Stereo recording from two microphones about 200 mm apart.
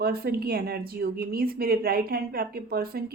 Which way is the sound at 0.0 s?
50° right (ahead or behind).